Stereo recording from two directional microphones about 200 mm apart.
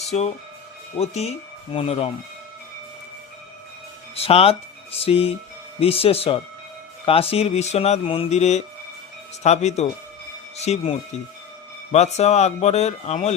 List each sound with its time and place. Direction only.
0.9 s speech: 30° left (ahead or behind)
4.1 s speech: 30° left (ahead or behind)